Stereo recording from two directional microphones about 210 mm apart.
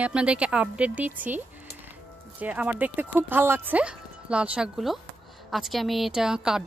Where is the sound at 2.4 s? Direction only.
5° right (ahead or behind).